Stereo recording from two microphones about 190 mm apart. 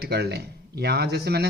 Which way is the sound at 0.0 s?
60° right (ahead or behind).